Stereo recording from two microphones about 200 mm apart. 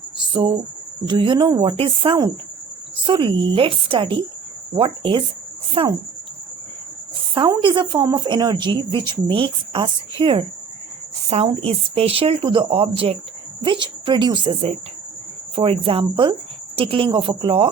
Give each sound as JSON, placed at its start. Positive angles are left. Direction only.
{"t": 0.2, "sound": "a sound", "side_deg": -25}
{"t": 1.0, "sound": "a woman's voice", "side_deg": -25}
{"t": 7.2, "sound": "a woman's voice", "side_deg": -25}